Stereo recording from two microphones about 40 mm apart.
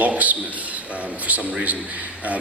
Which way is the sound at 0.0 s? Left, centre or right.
Right.